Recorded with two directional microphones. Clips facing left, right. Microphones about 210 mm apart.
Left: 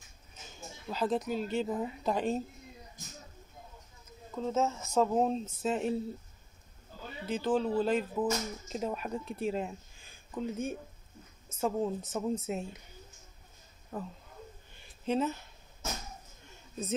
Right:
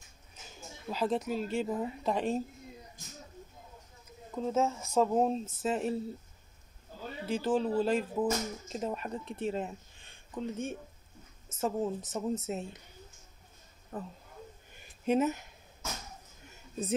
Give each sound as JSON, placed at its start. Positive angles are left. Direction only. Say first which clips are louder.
{"t": 0.8, "sound": "speech", "louder": "even", "side_deg": -5}
{"t": 4.4, "sound": "speech", "louder": "right 1 dB", "side_deg": -10}
{"t": 7.2, "sound": "speech", "louder": "even", "side_deg": -5}
{"t": 13.9, "sound": "speech", "louder": "left 1 dB", "side_deg": 0}
{"t": 15.0, "sound": "speech", "louder": "right 3 dB", "side_deg": -15}